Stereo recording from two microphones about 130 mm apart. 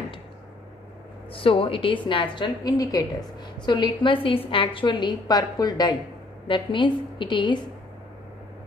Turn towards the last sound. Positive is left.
turn(degrees=35)  # may be behind; listen again after turning